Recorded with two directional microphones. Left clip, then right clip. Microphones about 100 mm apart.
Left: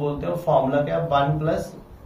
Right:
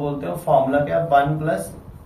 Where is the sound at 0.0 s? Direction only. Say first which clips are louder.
Even; 25° left (ahead or behind).